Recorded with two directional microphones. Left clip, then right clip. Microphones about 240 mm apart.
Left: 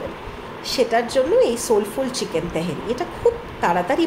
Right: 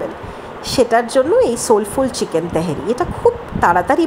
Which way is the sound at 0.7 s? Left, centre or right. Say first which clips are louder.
Right 5 dB; right.